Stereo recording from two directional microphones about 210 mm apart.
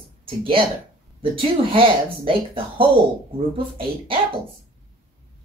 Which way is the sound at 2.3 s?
25° right (ahead or behind).